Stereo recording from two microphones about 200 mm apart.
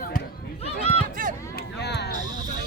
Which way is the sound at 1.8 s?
55° left (ahead or behind).